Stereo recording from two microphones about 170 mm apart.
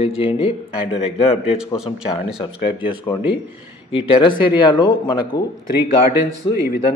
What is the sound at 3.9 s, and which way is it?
Speech, 30° left (ahead or behind).